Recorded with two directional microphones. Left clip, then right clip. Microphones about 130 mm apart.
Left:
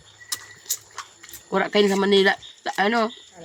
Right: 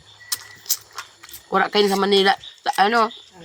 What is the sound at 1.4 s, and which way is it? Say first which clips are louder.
Speech: right 2 dB; 20° left (ahead or behind).